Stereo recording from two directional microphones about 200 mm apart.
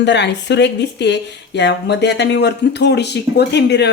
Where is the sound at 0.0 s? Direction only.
60° left (ahead or behind).